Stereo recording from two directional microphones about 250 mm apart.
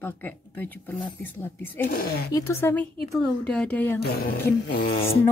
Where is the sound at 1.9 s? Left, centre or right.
Left.